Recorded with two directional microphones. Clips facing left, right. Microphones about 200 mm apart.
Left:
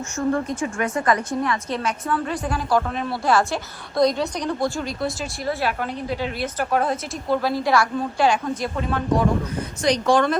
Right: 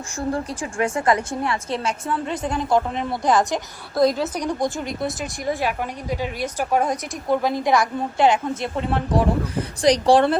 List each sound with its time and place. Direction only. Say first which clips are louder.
0.2 s a woman's voice: left 3 dB; 30° right (ahead or behind)
3.9 s a woman's voice: right 1 dB; centre (ahead or behind)
4.4 s a woman's voice: even; 20° right (ahead or behind)